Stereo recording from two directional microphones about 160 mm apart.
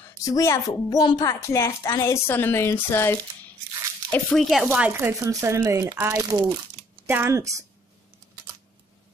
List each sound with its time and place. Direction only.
0.2 s a woman's voice: 20° left (ahead or behind)
4.1 s speech: 5° left (ahead or behind)
4.7 s speech: 10° right (ahead or behind)